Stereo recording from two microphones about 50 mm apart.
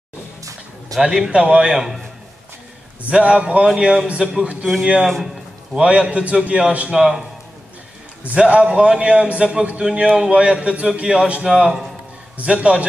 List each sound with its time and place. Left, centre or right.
1.0 s a man's voice: centre
3.1 s a man's voice: right
5.1 s a sound: centre
5.8 s speech: centre
6.9 s a man's voice: centre
8.4 s a man's voice: centre
11.5 s a man's voice: centre
12.4 s speech: centre